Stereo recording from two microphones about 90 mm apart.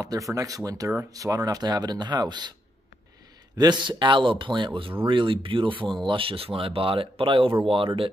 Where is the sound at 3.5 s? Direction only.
55° right (ahead or behind).